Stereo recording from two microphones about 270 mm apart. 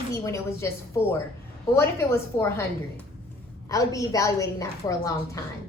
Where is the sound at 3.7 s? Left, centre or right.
Centre.